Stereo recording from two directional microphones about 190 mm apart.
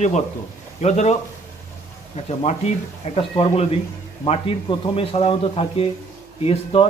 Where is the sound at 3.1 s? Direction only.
30° left (ahead or behind).